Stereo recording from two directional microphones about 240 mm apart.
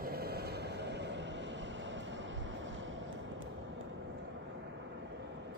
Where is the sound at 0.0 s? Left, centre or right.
Right.